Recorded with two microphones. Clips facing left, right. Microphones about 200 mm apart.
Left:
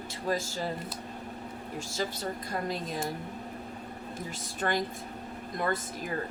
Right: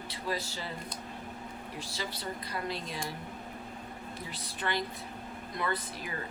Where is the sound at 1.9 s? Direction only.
45° left (ahead or behind).